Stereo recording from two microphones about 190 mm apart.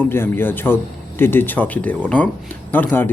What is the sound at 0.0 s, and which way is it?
Speech, 10° left (ahead or behind).